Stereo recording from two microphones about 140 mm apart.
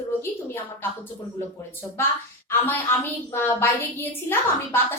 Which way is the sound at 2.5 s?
15° left (ahead or behind).